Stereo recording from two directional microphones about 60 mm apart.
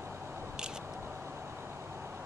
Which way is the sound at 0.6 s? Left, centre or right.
Centre.